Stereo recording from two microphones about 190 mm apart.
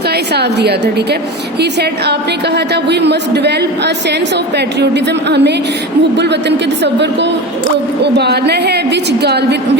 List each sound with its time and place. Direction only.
0.3 s a woman's voice: 60° right (ahead or behind)
2.9 s a woman's voice: 65° right (ahead or behind)
5.3 s a woman's voice: 65° right (ahead or behind)
6.8 s a woman's voice: 65° right (ahead or behind)